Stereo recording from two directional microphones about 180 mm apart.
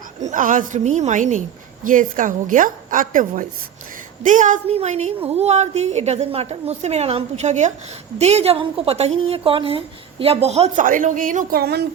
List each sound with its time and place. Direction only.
0.2 s a woman's voice: 45° right (ahead or behind)